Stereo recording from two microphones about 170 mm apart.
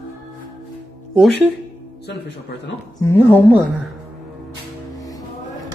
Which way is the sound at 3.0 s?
15° left (ahead or behind).